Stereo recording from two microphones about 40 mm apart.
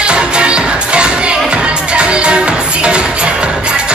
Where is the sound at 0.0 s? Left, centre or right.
Right.